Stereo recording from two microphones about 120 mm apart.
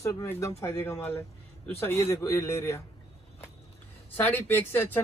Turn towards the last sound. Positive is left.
turn(degrees=15)  # may be behind; listen again after turning